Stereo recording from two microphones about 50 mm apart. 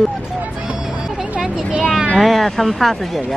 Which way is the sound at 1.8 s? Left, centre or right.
Centre.